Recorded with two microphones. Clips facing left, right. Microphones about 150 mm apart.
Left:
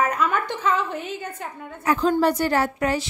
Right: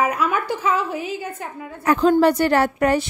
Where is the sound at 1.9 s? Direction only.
65° right (ahead or behind).